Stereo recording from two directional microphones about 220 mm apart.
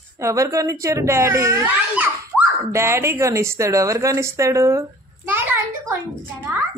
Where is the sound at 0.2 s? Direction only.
15° right (ahead or behind).